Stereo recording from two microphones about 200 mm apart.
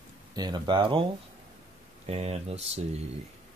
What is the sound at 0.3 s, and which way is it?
Speech, 20° right (ahead or behind).